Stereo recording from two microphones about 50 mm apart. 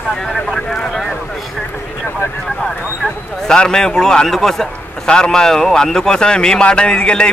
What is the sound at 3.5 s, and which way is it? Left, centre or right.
A man's voice, centre.